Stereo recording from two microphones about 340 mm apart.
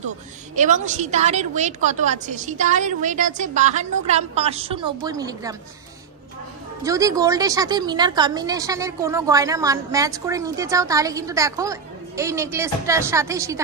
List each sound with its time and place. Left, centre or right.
0.6 s a woman's voice: right
6.8 s a woman's voice: centre